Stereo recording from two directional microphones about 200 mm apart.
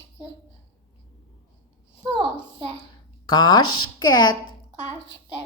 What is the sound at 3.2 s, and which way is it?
Speech, 20° left (ahead or behind).